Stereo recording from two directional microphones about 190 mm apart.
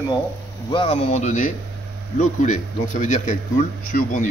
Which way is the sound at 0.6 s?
30° left (ahead or behind).